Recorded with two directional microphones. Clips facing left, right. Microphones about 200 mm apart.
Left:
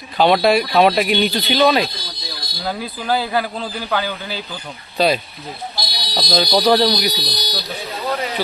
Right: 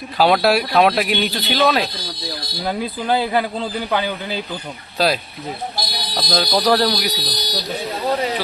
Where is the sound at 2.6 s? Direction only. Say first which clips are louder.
Right 1 dB; 25° right (ahead or behind).